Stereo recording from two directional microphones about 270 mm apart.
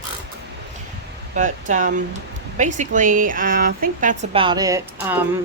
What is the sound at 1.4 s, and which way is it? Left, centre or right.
Speech, right.